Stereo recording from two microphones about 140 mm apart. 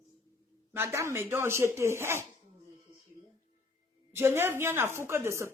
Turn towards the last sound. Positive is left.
turn(degrees=-20)  # may be behind; listen again after turning